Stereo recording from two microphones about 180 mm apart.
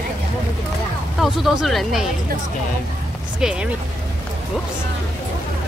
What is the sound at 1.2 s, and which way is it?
Speech, centre (ahead or behind).